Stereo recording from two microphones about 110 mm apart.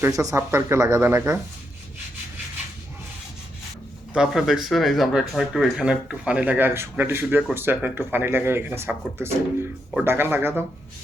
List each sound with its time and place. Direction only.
0.0 s speech: 30° right (ahead or behind)
4.1 s speech: 5° right (ahead or behind)